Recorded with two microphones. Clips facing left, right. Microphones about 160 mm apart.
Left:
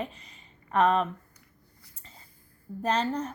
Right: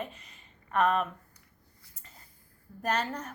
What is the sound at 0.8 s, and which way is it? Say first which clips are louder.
Speech: left 3 dB; 30° left (ahead or behind).